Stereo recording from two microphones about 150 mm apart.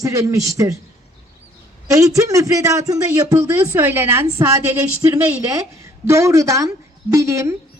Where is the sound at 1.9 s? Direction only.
20° right (ahead or behind).